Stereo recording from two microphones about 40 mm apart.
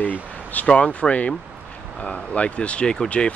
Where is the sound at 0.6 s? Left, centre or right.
Left.